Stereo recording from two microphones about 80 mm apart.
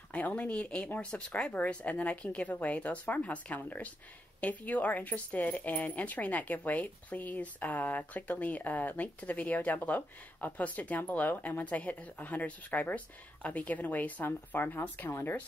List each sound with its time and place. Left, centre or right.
0.1 s speech: centre